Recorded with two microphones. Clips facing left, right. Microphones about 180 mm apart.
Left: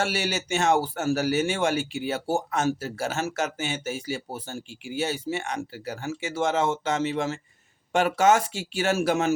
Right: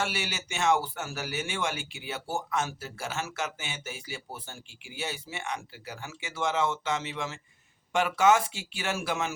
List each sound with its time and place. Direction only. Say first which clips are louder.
0.0 s speech: left 6 dB; 40° left (ahead or behind)